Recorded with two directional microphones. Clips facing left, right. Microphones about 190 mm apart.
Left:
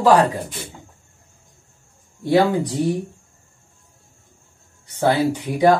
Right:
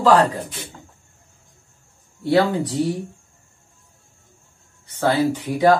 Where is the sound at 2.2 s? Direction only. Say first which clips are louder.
Left 1 dB; 15° left (ahead or behind).